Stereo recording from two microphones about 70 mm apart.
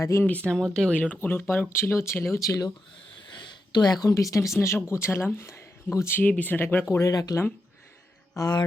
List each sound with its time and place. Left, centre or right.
0.0 s speech: left
0.3 s speech: left
0.5 s speech: centre
0.9 s speech: left
1.3 s speech: left
3.2 s a sound: left
4.1 s speech: left
6.1 s speech: left
7.0 s speech: left
8.4 s speech: left